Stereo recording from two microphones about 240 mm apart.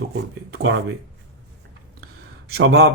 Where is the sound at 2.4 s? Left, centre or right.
Right.